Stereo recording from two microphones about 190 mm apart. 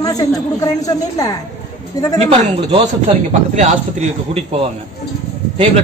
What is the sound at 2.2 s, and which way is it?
A man's voice, 35° right (ahead or behind).